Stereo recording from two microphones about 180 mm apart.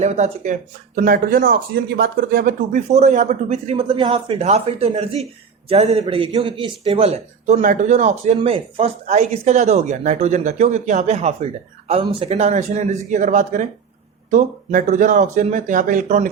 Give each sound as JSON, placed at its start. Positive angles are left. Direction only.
{"t": 0.0, "sound": "speech", "side_deg": -40}
{"t": 8.4, "sound": "speech", "side_deg": -30}